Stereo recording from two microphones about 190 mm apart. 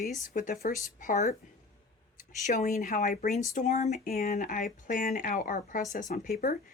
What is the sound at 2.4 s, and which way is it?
Speech, 45° left (ahead or behind).